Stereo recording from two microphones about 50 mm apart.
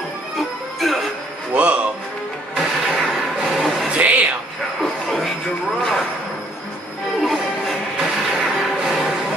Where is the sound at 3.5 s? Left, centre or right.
Centre.